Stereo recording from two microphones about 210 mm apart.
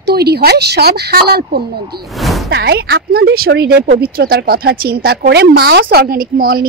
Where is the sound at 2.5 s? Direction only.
50° right (ahead or behind).